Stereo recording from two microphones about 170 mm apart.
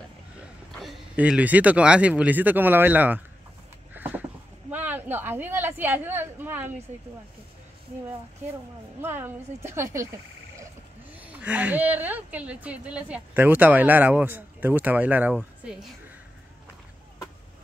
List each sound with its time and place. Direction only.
0.7 s a sound: centre (ahead or behind)
1.1 s a woman's voice: 10° right (ahead or behind)
9.0 s a woman's voice: 15° right (ahead or behind)
11.1 s a woman's voice: 10° right (ahead or behind)